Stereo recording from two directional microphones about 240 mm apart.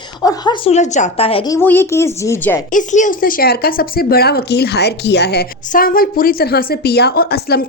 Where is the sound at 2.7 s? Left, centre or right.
Left.